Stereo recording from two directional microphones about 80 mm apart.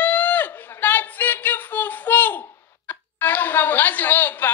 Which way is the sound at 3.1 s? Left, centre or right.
Left.